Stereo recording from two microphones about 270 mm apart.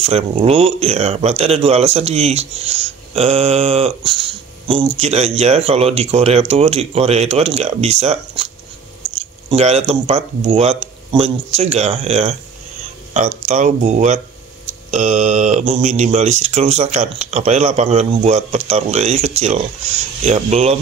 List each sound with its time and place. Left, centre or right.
0.0 s speech: right
9.5 s speech: right
13.5 s speech: right